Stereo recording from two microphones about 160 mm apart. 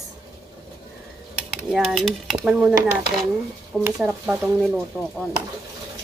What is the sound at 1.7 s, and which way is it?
A woman's voice, centre (ahead or behind).